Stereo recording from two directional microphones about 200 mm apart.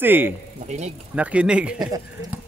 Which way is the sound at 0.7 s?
35° right (ahead or behind).